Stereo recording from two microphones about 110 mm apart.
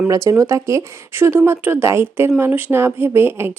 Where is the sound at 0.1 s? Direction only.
30° right (ahead or behind).